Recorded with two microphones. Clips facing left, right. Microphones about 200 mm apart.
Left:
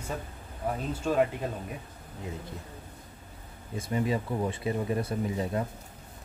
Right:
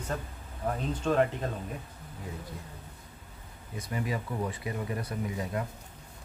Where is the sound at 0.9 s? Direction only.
10° left (ahead or behind).